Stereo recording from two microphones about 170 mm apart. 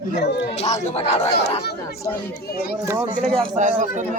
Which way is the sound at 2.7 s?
15° right (ahead or behind).